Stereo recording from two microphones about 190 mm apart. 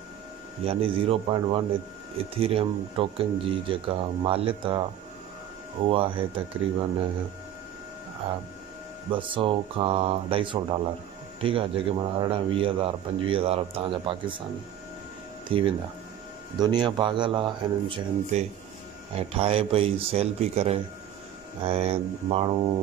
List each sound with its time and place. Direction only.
0.7 s a man's voice: 30° right (ahead or behind)
5.9 s a man's voice: 25° right (ahead or behind)
9.1 s a man's voice: 25° right (ahead or behind)
15.5 s a man's voice: 30° right (ahead or behind)